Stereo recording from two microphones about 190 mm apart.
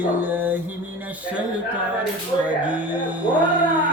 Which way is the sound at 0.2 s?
10° right (ahead or behind).